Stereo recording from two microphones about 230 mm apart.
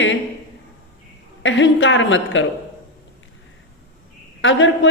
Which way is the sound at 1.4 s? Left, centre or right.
Left.